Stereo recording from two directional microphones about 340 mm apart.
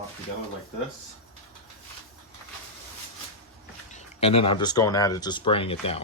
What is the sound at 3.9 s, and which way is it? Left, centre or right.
Speech, centre.